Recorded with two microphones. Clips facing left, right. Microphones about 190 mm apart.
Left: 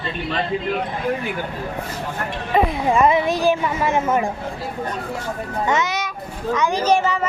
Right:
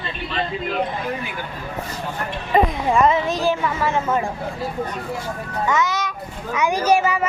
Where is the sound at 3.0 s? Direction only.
10° left (ahead or behind).